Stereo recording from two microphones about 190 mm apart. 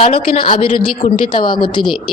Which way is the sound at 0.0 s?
30° left (ahead or behind).